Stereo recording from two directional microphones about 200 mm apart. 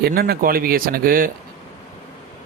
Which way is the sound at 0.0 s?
50° right (ahead or behind).